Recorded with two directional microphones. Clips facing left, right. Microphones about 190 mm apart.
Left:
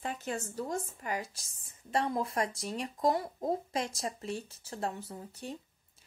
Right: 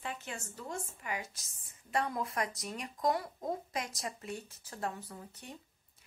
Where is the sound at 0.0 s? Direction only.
40° left (ahead or behind).